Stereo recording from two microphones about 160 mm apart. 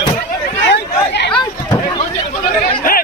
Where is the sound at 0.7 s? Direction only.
90° left.